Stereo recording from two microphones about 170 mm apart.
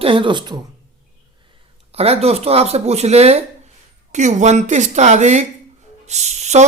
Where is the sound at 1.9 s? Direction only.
35° right (ahead or behind).